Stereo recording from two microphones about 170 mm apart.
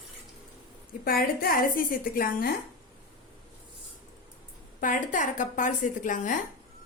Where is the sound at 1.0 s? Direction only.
60° left (ahead or behind).